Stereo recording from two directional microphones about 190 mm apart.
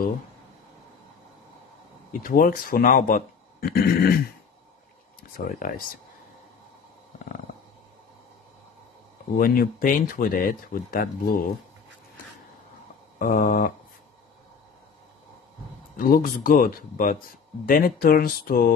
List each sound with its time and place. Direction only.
2.1 s speech: 45° left (ahead or behind)
5.4 s speech: 55° left (ahead or behind)
9.4 s speech: 50° left (ahead or behind)
13.2 s speech: 45° left (ahead or behind)
16.0 s speech: 45° left (ahead or behind)